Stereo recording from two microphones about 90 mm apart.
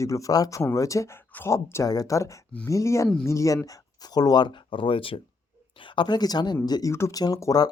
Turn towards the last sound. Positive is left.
turn(degrees=40)  # may be behind; listen again after turning